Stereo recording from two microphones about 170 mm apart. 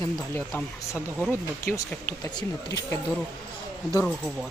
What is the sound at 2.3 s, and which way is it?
Speech, 20° left (ahead or behind).